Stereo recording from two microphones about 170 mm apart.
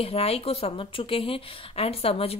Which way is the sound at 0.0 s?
35° left (ahead or behind).